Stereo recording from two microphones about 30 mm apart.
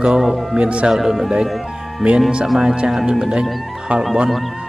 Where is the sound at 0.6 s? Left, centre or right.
Right.